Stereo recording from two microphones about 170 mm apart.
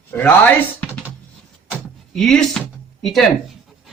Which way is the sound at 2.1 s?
Centre (ahead or behind).